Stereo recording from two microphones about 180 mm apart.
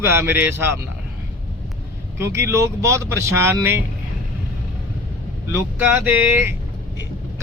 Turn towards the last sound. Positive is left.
turn(degrees=-10)  # may be behind; listen again after turning